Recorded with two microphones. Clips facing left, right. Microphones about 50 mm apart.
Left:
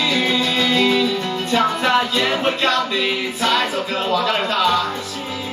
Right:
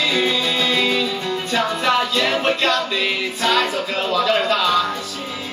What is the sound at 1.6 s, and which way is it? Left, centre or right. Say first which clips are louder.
Music: left 2 dB; centre.